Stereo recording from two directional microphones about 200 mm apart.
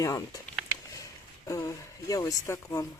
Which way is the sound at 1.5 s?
15° left (ahead or behind).